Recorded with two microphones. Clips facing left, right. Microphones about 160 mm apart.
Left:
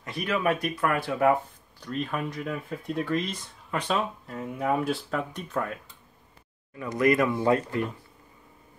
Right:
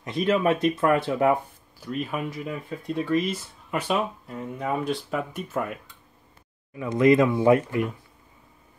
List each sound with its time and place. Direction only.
0.0 s speech: 25° right (ahead or behind)
1.8 s speech: 5° right (ahead or behind)
6.7 s speech: 20° right (ahead or behind)